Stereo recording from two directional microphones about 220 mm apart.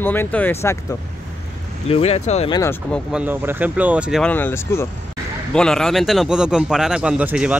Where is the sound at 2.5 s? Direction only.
15° left (ahead or behind).